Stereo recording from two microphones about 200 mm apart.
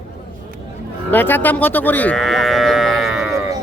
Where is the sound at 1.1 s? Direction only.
10° left (ahead or behind).